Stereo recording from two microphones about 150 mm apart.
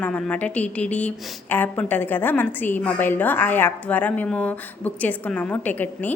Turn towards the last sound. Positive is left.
turn(degrees=10)  # may be behind; listen again after turning